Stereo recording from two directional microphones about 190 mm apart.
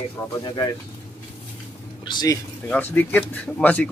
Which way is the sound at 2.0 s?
20° left (ahead or behind).